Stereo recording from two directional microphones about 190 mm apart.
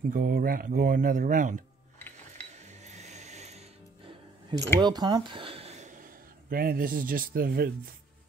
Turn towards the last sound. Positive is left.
turn(degrees=-50)  # may be behind; listen again after turning